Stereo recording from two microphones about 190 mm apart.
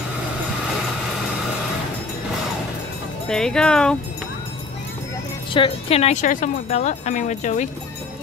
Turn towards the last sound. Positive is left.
turn(degrees=40)  # may be behind; listen again after turning